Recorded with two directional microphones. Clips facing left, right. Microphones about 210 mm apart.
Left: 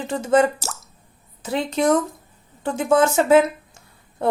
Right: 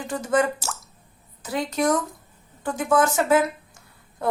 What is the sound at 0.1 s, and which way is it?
A woman's voice, 25° left (ahead or behind).